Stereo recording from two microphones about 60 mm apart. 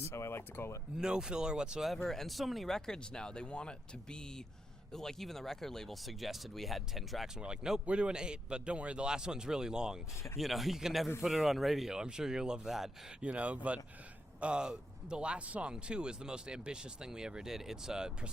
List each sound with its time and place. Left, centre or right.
0.0 s speech: left
0.9 s a man's voice: centre
1.9 s speech: centre
7.3 s a man's voice: centre
13.2 s a man's voice: right